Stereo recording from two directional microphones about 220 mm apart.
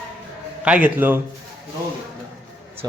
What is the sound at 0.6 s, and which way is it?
Speech, 5° right (ahead or behind).